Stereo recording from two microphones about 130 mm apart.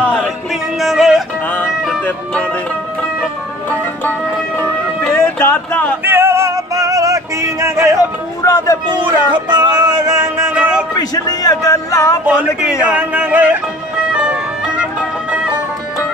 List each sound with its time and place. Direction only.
0.5 s music: centre (ahead or behind)
2.0 s speech: 10° left (ahead or behind)
4.6 s music: 15° left (ahead or behind)
6.0 s music: 20° right (ahead or behind)
8.4 s speech: 25° left (ahead or behind)
8.9 s a sound: 35° right (ahead or behind)
10.3 s music: 15° right (ahead or behind)
11.0 s speech: 30° left (ahead or behind)
12.9 s music: 10° right (ahead or behind)